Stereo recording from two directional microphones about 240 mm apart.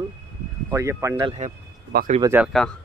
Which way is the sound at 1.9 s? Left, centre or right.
Right.